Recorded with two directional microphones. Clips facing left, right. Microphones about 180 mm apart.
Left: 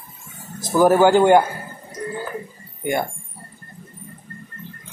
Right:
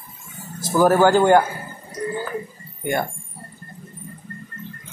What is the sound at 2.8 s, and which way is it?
Speech, 10° left (ahead or behind).